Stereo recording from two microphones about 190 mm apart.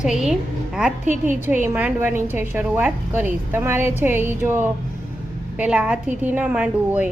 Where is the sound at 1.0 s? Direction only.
40° right (ahead or behind).